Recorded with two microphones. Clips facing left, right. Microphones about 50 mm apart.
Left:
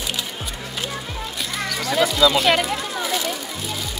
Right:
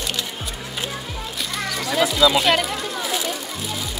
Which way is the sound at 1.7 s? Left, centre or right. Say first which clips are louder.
Left 1 dB; centre.